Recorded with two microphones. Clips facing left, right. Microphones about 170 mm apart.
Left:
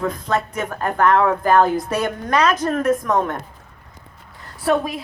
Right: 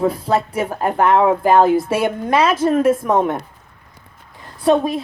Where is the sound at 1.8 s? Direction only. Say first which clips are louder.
Right 3 dB; 5° right (ahead or behind).